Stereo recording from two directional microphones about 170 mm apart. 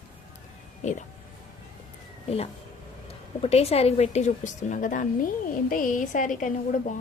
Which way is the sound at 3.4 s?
35° left (ahead or behind).